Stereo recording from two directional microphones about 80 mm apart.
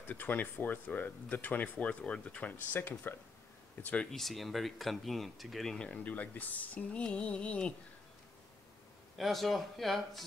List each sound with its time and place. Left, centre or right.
0.0 s speech: left
4.1 s speech: centre
5.8 s speech: centre
9.2 s speech: centre